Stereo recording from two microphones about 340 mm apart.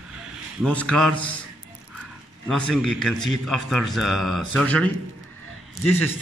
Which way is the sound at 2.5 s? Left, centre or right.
Centre.